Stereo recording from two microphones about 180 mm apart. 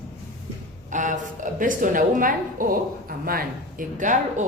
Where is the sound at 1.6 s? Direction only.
50° right (ahead or behind).